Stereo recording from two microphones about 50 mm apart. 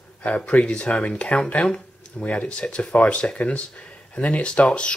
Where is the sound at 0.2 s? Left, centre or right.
Left.